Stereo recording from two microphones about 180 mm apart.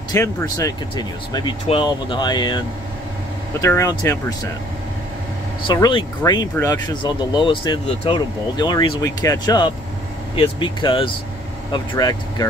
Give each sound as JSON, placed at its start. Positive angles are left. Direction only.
{"t": 0.1, "sound": "speech", "side_deg": 15}
{"t": 3.6, "sound": "speech", "side_deg": 15}
{"t": 5.7, "sound": "speech", "side_deg": 25}